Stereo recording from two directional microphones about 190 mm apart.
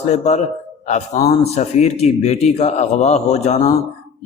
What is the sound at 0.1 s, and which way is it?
A man's voice, 35° left (ahead or behind).